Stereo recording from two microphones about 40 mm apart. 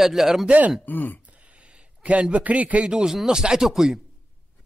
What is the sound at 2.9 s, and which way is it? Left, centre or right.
Speech, centre.